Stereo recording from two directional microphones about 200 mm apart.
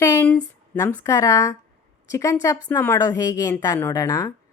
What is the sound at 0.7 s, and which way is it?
A woman's voice, 10° left (ahead or behind).